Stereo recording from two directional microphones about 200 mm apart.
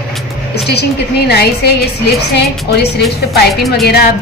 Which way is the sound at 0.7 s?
55° left (ahead or behind).